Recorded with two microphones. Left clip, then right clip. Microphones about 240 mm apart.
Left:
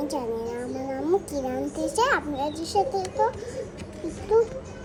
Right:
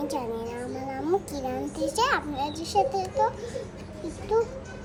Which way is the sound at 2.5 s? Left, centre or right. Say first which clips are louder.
Right 1 dB; right.